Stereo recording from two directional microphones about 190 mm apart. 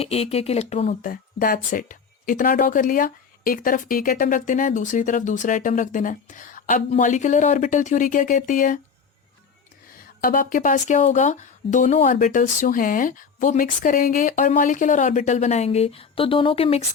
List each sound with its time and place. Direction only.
0.0 s speech: 30° left (ahead or behind)
1.0 s speech: 45° left (ahead or behind)
10.2 s speech: 45° left (ahead or behind); by 16.8 s 30° left (ahead or behind)